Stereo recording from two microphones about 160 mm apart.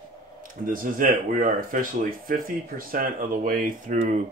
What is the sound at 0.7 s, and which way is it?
Speech, 55° right (ahead or behind).